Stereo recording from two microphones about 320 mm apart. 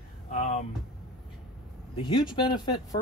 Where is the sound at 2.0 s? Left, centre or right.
Centre.